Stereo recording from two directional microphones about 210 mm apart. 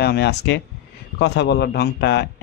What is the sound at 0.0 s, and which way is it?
A man's voice, 50° left (ahead or behind).